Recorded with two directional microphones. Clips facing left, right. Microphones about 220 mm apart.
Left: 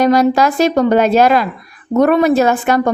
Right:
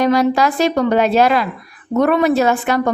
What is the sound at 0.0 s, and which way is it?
A woman's voice, 40° left (ahead or behind).